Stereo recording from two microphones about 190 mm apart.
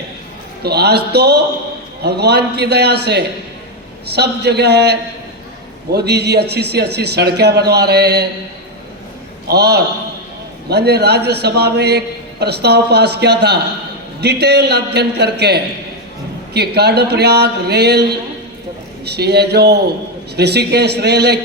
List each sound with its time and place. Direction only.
0.6 s a man's voice: 60° right (ahead or behind)
9.5 s a man's voice: 60° right (ahead or behind)